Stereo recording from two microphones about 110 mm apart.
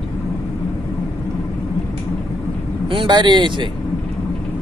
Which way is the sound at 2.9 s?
45° right (ahead or behind).